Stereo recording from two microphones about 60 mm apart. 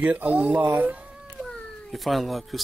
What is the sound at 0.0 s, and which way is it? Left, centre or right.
Speech, right.